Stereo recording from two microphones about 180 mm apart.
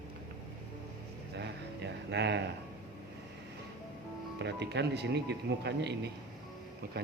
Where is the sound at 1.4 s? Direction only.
75° right (ahead or behind).